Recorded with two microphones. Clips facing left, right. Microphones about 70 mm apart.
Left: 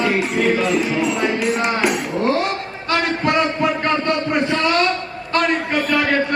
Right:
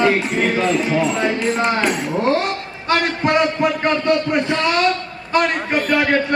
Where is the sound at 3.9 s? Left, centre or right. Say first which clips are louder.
Right 2 dB; left.